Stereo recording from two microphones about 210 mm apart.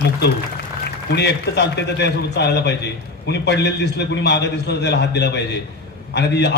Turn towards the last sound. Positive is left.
turn(degrees=55)  # may be behind; listen again after turning